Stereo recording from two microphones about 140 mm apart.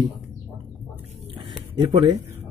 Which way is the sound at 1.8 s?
35° right (ahead or behind).